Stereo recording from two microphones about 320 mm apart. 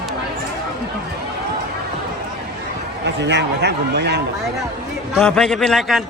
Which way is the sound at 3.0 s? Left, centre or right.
Right.